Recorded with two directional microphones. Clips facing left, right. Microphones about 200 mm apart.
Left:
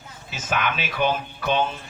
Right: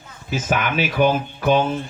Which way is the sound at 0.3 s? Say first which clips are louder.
Right 4 dB; 50° right (ahead or behind).